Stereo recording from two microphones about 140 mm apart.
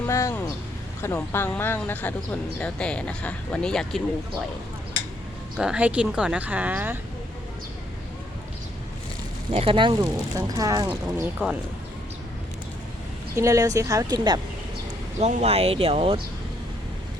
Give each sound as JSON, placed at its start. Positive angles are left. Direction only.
{"t": 0.0, "sound": "speech", "side_deg": 20}
{"t": 5.5, "sound": "speech", "side_deg": -5}
{"t": 9.5, "sound": "speech", "side_deg": -40}
{"t": 10.0, "sound": "speech", "side_deg": -25}
{"t": 10.8, "sound": "speech", "side_deg": -15}
{"t": 13.3, "sound": "speech", "side_deg": -20}
{"t": 15.2, "sound": "speech", "side_deg": -55}